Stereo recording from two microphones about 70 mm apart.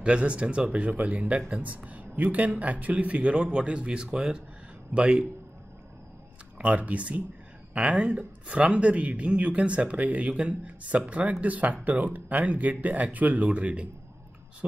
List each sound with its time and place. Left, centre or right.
0.0 s speech: centre
6.6 s speech: right